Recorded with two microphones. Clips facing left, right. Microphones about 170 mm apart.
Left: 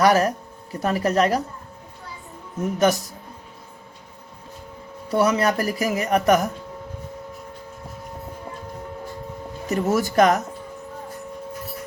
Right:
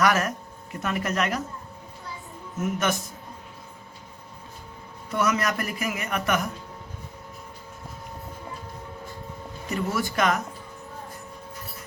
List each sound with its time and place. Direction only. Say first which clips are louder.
0.0 s speech: left 6 dB; 35° left (ahead or behind)
2.6 s speech: left 6 dB; 35° left (ahead or behind)
5.0 s speech: left 6 dB; 30° left (ahead or behind)
9.6 s speech: left 6 dB; 45° left (ahead or behind)